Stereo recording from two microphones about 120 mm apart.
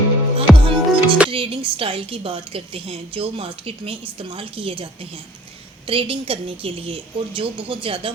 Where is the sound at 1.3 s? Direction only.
50° right (ahead or behind).